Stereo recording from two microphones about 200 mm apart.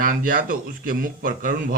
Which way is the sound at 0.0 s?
45° right (ahead or behind).